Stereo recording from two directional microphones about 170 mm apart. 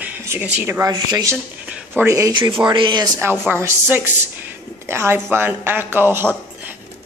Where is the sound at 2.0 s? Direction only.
20° right (ahead or behind).